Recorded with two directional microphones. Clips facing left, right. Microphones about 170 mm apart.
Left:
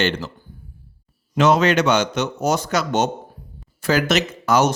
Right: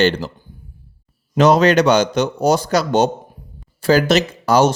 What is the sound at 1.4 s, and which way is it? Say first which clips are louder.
Speech: right 4 dB; 35° right (ahead or behind).